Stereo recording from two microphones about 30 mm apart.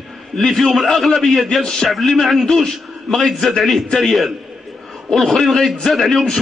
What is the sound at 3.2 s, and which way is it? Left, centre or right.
A man's voice, centre.